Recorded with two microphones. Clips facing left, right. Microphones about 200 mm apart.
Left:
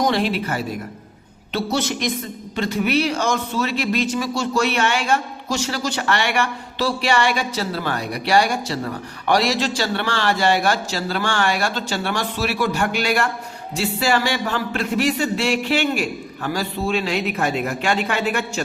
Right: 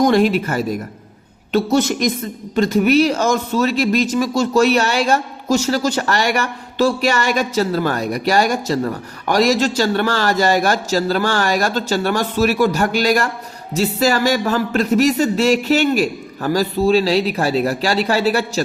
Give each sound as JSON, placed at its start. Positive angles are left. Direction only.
{"t": 0.0, "sound": "speech", "side_deg": -45}